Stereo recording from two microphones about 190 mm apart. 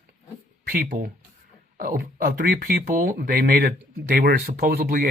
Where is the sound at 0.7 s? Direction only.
50° right (ahead or behind).